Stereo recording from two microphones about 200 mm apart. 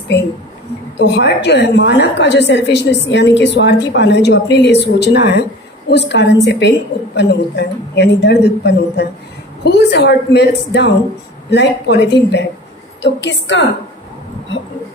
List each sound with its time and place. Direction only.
0.9 s a woman's voice: 60° left (ahead or behind)